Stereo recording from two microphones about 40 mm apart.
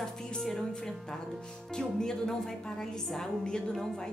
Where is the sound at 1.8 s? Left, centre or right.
Centre.